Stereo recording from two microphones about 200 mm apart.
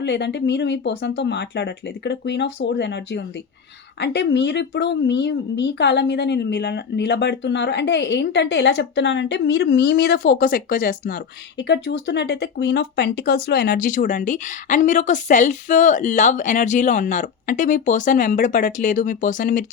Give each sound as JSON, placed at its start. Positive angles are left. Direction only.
{"t": 0.0, "sound": "speech", "side_deg": 60}